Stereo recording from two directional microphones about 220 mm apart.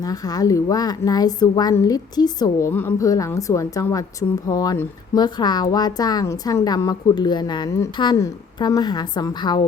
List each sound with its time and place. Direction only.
0.0 s a woman's voice: 15° left (ahead or behind)